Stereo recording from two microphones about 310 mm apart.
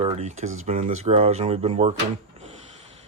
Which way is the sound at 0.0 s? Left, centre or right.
Right.